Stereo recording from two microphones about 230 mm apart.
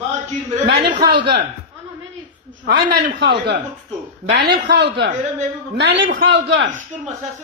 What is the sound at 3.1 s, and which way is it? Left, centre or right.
Speech, right.